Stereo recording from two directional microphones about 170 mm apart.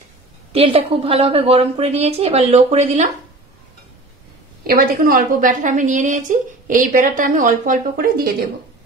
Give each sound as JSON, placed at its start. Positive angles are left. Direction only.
{"t": 0.5, "sound": "a woman's voice", "side_deg": -35}
{"t": 4.6, "sound": "a woman's voice", "side_deg": -60}